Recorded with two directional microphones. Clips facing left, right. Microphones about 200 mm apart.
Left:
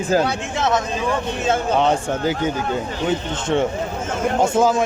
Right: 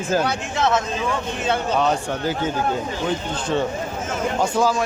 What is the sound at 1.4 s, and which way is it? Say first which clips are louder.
Speech: left 2 dB; 45° left (ahead or behind).